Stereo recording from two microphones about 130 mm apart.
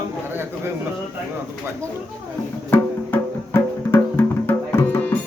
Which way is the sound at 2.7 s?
15° left (ahead or behind).